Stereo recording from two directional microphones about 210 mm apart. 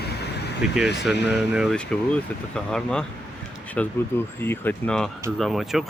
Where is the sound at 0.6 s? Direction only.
Centre (ahead or behind).